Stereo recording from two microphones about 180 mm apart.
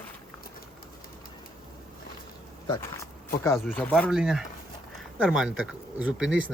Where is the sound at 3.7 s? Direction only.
5° left (ahead or behind).